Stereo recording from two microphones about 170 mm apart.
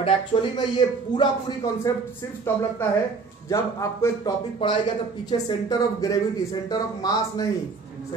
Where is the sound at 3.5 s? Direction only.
20° left (ahead or behind).